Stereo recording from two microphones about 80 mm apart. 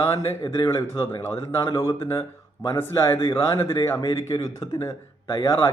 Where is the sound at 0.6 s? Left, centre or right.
Left.